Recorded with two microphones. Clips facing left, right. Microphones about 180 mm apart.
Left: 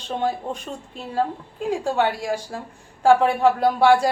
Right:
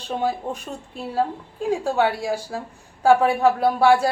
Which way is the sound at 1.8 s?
5° right (ahead or behind).